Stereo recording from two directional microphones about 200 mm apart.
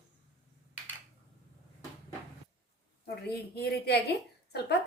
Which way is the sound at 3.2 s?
55° left (ahead or behind).